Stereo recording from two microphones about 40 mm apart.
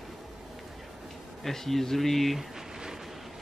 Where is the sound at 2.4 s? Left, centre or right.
Centre.